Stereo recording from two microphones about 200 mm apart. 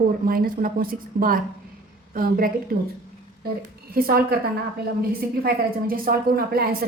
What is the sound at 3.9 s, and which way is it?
Speech, 50° right (ahead or behind).